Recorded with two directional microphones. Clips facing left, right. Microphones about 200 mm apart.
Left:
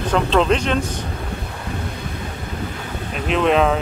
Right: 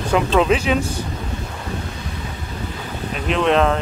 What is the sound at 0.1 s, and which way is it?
Speech, 5° right (ahead or behind).